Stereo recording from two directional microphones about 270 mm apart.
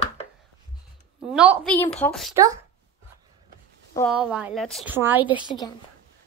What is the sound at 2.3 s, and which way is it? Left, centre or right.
Speech, centre.